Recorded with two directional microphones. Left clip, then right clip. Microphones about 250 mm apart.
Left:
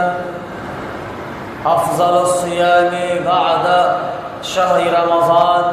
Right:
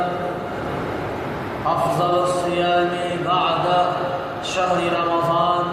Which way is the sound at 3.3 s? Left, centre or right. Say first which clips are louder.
Left 5 dB; left.